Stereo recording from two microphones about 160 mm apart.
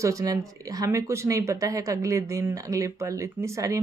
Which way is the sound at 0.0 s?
20° right (ahead or behind).